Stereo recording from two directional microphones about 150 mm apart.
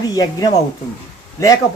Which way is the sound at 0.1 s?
25° left (ahead or behind).